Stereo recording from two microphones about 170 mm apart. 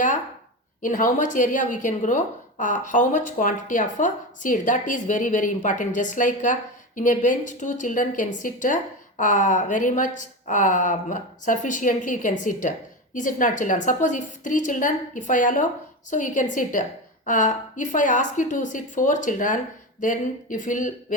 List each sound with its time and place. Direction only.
0.8 s a woman's voice: 50° left (ahead or behind)